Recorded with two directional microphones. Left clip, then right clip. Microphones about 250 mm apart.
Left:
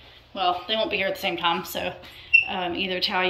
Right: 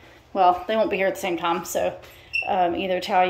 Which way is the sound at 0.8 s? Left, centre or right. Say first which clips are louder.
Right 2 dB; centre.